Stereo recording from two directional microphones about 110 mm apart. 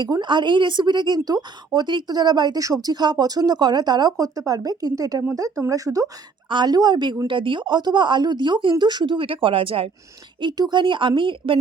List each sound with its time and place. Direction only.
0.0 s a woman's voice: 40° right (ahead or behind); by 9.9 s 60° right (ahead or behind)
10.4 s speech: 45° right (ahead or behind)